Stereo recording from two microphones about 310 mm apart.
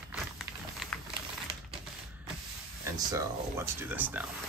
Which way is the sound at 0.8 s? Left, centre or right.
Centre.